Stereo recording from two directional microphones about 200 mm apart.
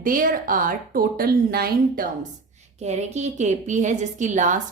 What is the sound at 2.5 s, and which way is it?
A woman's voice, 35° right (ahead or behind).